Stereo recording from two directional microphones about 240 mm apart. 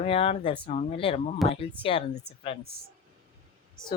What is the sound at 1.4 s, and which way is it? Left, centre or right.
Speech, centre.